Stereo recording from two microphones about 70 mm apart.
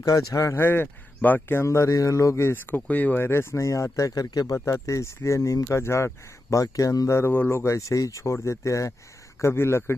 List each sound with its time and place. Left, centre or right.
0.0 s speech: left
0.7 s speech: left
3.3 s speech: left
3.6 s speech: left
4.6 s speech: left
7.6 s speech: left